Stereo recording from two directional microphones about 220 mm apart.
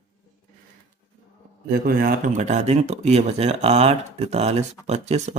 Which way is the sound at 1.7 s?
40° right (ahead or behind).